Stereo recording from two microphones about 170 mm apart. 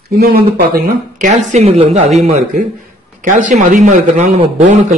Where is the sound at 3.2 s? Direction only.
50° right (ahead or behind).